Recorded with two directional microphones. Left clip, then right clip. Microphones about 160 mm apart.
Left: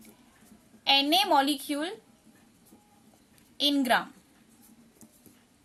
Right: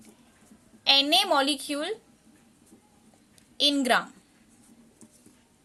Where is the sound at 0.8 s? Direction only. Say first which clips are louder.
Right 2 dB; 30° right (ahead or behind).